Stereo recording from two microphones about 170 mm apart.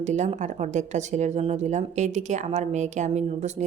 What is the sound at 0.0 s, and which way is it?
Speech, 45° right (ahead or behind).